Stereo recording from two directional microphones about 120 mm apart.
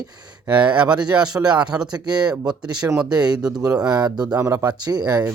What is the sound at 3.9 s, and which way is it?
Speech, 35° right (ahead or behind).